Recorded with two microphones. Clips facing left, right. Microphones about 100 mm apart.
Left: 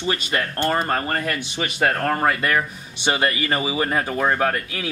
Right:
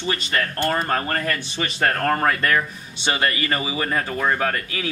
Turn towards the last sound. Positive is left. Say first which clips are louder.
# left 2 dB
turn(degrees=15)  # may be behind; listen again after turning